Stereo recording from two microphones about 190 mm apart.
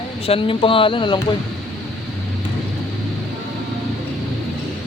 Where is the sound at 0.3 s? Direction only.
30° left (ahead or behind).